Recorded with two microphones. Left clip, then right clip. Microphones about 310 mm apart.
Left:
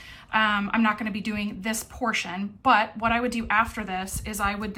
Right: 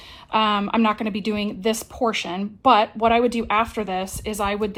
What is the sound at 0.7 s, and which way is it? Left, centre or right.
A woman's voice, centre.